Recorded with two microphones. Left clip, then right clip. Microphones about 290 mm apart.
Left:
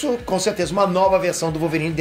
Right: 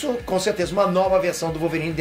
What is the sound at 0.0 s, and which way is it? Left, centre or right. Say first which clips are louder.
Speech: left 2 dB; centre.